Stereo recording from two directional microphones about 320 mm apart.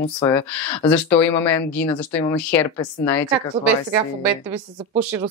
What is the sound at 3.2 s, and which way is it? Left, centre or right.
Speech, centre.